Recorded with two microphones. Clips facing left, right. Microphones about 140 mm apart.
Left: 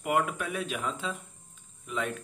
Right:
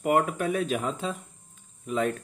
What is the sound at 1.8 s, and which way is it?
Hum, 40° right (ahead or behind).